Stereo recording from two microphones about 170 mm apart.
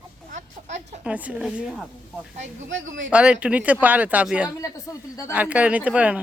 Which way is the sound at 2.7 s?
90° right.